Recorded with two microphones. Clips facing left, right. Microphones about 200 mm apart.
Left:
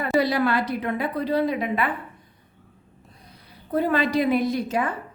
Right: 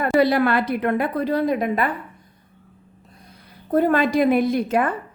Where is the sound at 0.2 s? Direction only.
55° right (ahead or behind).